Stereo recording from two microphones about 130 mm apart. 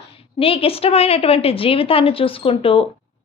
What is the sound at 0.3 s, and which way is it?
A woman's voice, 45° left (ahead or behind).